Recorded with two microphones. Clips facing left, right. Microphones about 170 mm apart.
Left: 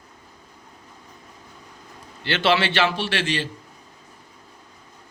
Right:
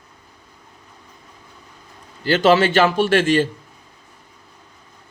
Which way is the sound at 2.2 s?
40° right (ahead or behind).